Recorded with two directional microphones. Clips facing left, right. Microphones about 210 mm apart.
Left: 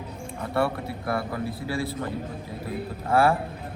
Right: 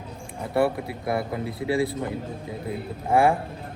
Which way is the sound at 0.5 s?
20° right (ahead or behind).